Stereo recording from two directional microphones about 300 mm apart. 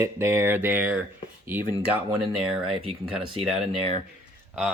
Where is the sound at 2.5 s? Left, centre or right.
Centre.